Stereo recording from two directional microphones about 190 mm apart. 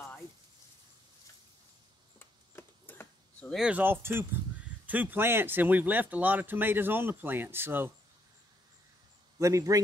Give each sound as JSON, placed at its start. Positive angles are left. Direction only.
{"t": 2.1, "sound": "a sound", "side_deg": 10}
{"t": 4.8, "sound": "speech", "side_deg": -10}
{"t": 9.4, "sound": "speech", "side_deg": -15}